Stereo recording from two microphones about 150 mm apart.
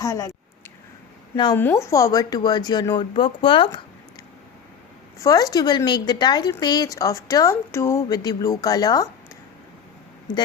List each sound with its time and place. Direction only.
0.0 s speech: 20° left (ahead or behind)
1.5 s speech: 15° left (ahead or behind); by 3.8 s 35° left (ahead or behind)
5.2 s speech: 25° left (ahead or behind)